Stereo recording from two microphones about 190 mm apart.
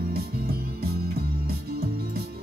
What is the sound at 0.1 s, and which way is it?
Music, 55° right (ahead or behind).